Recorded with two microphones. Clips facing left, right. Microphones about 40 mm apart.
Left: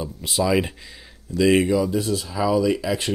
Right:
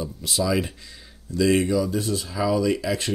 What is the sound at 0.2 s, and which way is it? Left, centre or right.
Speech, left.